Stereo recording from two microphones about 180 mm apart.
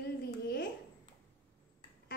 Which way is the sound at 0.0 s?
65° left (ahead or behind).